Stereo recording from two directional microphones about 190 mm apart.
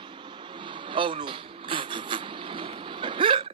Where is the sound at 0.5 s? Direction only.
25° right (ahead or behind).